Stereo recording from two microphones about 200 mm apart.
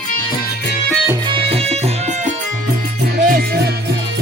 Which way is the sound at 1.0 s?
20° right (ahead or behind).